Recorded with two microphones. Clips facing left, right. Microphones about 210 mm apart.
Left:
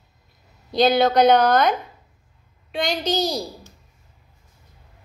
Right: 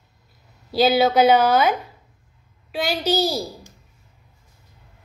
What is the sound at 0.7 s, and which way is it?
A woman's voice, 5° right (ahead or behind).